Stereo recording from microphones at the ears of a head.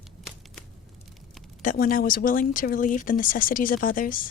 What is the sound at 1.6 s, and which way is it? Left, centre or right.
A woman's voice, left.